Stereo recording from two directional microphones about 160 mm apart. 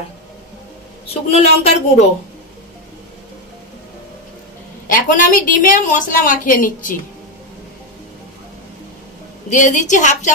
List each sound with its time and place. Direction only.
1.0 s a woman's voice: 40° left (ahead or behind)
4.8 s a woman's voice: 55° left (ahead or behind)
9.5 s a woman's voice: 50° left (ahead or behind)